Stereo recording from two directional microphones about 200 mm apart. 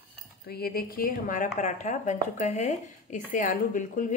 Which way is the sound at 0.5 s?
50° left (ahead or behind).